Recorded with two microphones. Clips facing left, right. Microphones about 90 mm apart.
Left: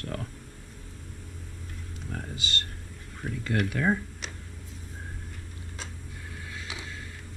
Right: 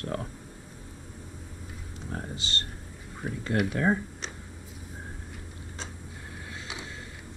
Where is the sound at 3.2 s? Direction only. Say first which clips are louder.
Right 1 dB; 15° right (ahead or behind).